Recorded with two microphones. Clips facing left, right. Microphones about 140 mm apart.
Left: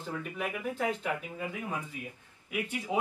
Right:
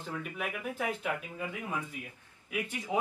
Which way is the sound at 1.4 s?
10° left (ahead or behind).